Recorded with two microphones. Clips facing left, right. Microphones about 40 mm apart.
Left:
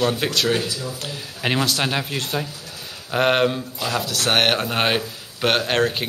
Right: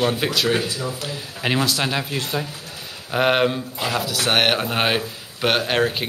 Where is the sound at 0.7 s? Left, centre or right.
Right.